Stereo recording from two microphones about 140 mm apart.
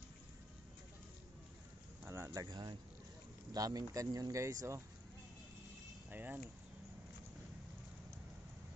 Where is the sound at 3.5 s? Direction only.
25° right (ahead or behind).